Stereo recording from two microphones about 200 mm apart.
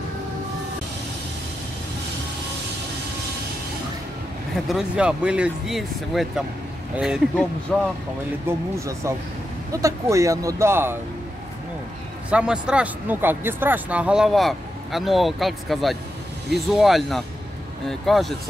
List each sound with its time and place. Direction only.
4.6 s speech: 5° right (ahead or behind)
8.5 s speech: 15° right (ahead or behind)
12.3 s speech: 5° right (ahead or behind)